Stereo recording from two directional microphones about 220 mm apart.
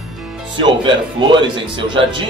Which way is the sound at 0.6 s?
20° right (ahead or behind).